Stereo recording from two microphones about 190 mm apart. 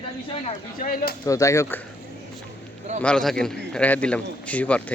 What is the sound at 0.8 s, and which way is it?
Bird, 50° left (ahead or behind).